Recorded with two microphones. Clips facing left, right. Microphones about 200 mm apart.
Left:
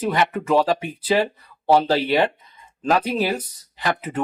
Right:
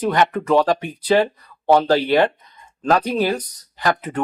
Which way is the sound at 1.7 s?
30° left (ahead or behind).